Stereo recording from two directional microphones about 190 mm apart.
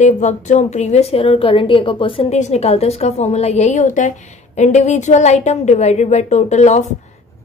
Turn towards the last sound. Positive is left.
turn(degrees=35)  # may be behind; listen again after turning